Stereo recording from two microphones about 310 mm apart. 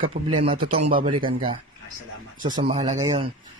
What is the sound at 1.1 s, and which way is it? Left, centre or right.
Speech, centre.